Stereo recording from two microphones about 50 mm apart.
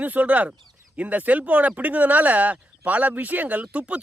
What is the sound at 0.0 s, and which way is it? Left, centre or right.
Speech, right.